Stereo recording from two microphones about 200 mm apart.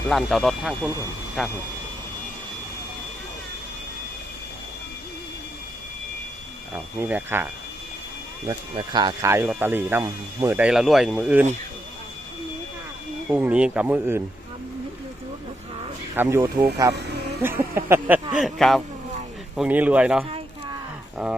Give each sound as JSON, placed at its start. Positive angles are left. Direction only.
{"t": 0.1, "sound": "speech", "side_deg": 0}
{"t": 6.7, "sound": "speech", "side_deg": -10}
{"t": 8.4, "sound": "speech", "side_deg": -20}
{"t": 13.3, "sound": "speech", "side_deg": -5}
{"t": 16.1, "sound": "speech", "side_deg": -10}
{"t": 16.9, "sound": "a sound", "side_deg": -55}
{"t": 17.4, "sound": "speech", "side_deg": -10}